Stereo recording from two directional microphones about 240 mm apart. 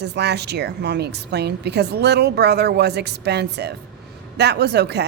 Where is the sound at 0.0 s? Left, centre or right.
Right.